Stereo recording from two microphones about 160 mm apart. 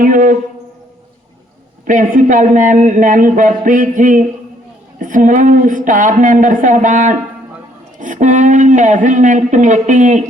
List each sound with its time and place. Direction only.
0.0 s speech: 55° right (ahead or behind)
1.9 s speech: 55° right (ahead or behind)